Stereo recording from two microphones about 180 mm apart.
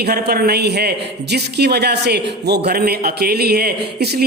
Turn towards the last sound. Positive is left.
turn(degrees=-60)  # may be behind; listen again after turning